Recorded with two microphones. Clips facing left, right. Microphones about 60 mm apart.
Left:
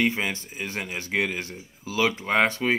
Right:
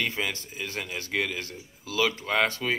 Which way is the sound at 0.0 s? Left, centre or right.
Left.